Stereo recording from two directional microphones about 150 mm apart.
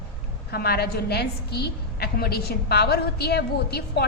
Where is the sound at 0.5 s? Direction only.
90° left.